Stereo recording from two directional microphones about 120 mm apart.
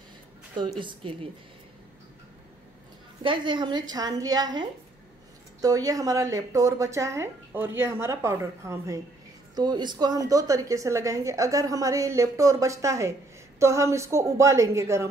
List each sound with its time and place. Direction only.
0.7 s a woman's voice: 45° right (ahead or behind)
3.2 s a woman's voice: 40° right (ahead or behind); by 9.0 s 25° right (ahead or behind)
9.6 s a woman's voice: 35° right (ahead or behind)